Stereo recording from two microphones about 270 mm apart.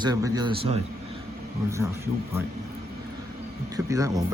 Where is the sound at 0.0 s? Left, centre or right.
Centre.